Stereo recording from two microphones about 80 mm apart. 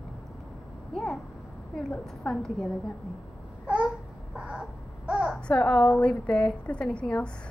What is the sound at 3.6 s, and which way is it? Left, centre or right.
Babbling, centre.